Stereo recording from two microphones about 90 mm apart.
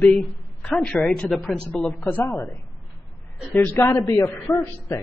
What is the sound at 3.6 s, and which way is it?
Speech, 30° left (ahead or behind).